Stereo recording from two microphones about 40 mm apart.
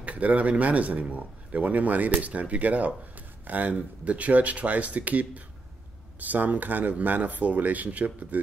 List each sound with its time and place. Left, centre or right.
0.0 s speech: right